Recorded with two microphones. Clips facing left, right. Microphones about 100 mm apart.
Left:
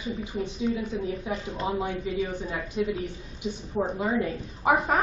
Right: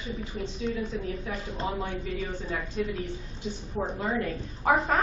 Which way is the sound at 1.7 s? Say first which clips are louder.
Left 4 dB; 15° left (ahead or behind).